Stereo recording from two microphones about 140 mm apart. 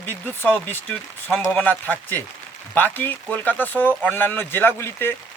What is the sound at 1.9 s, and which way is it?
Speech, 15° left (ahead or behind).